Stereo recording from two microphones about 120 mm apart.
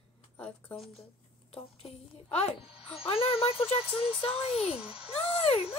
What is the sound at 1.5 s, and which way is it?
A woman's voice, 55° left (ahead or behind).